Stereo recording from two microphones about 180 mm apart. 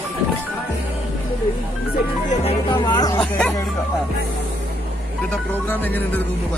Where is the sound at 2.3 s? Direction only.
30° left (ahead or behind).